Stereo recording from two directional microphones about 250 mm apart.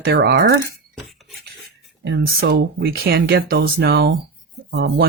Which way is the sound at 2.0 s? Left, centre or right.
Right.